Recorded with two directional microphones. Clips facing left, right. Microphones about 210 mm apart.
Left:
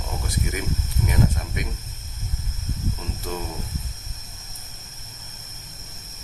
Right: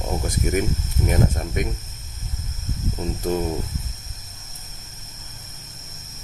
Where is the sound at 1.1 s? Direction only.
45° right (ahead or behind).